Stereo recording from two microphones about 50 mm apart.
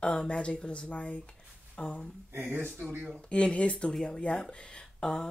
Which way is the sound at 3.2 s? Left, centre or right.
Left.